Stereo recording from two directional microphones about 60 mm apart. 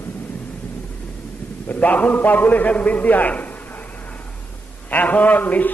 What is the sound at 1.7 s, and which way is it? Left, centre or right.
A man's voice, left.